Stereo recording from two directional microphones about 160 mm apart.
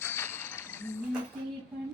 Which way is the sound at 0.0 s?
15° left (ahead or behind).